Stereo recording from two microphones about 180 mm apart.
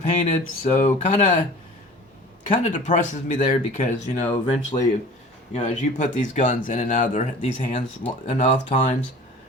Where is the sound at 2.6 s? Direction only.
40° left (ahead or behind).